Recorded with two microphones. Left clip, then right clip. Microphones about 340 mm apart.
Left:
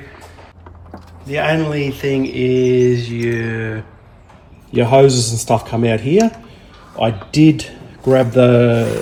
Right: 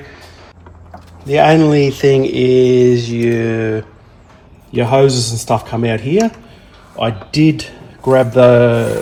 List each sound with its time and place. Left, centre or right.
1.3 s mantra: centre
4.7 s speech: centre